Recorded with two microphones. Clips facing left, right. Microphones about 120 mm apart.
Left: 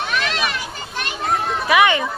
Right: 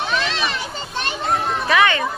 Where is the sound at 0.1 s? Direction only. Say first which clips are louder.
Even; 25° right (ahead or behind).